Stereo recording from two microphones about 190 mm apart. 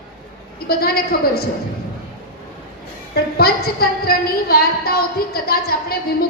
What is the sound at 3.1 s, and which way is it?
A woman's voice, 55° left (ahead or behind).